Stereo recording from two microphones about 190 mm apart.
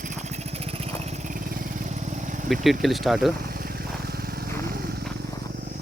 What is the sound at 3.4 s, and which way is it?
Vehicle, 50° right (ahead or behind).